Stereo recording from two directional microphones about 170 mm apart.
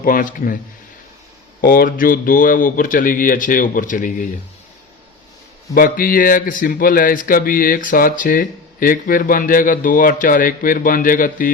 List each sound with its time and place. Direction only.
0.0 s speech: 55° left (ahead or behind)
1.6 s speech: 55° left (ahead or behind)
5.7 s speech: 60° left (ahead or behind)